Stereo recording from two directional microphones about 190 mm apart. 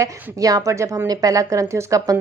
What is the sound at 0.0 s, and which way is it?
Speech, 15° right (ahead or behind).